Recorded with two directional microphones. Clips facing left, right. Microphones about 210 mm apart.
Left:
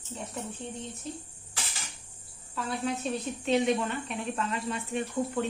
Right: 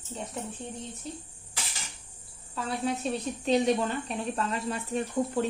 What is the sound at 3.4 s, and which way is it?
Speech, 35° right (ahead or behind).